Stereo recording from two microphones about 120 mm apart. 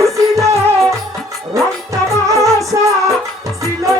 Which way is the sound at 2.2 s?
25° right (ahead or behind).